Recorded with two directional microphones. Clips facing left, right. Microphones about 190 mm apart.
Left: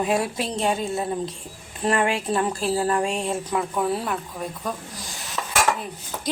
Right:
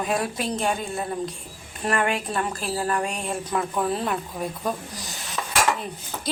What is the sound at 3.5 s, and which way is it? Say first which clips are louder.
Speech: right 1 dB; 10° left (ahead or behind).